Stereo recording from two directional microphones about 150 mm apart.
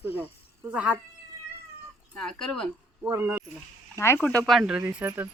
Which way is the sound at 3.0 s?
10° right (ahead or behind).